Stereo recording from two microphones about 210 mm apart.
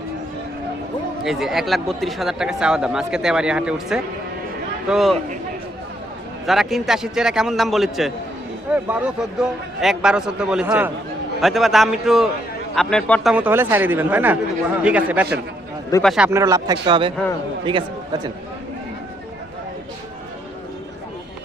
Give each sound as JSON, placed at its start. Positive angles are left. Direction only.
{"t": 1.2, "sound": "speech", "side_deg": 0}
{"t": 6.4, "sound": "speech", "side_deg": 0}
{"t": 13.3, "sound": "speech", "side_deg": -10}